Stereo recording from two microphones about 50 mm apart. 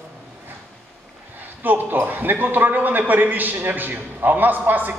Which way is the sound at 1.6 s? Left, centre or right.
Right.